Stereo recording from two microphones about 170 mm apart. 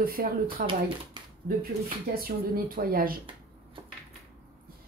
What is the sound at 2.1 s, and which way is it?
Speech, 60° right (ahead or behind).